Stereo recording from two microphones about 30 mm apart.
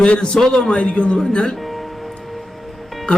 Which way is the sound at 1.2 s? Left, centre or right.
Left.